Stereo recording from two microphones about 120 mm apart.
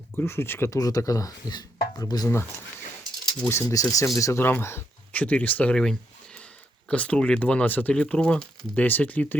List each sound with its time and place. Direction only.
0.2 s speech: 20° left (ahead or behind)
0.8 s speech: 30° left (ahead or behind)
3.5 s speech: 25° left (ahead or behind)